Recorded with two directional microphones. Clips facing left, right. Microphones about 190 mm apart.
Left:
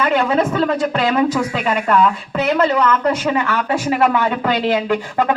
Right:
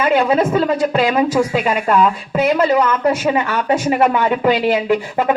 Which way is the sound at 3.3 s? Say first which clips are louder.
Right 2 dB; 20° right (ahead or behind).